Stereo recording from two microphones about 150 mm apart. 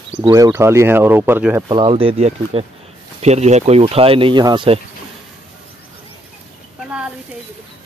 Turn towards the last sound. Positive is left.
turn(degrees=-5)  # may be behind; listen again after turning